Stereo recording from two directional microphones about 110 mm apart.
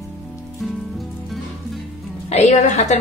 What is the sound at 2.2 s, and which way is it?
Speech, 85° left.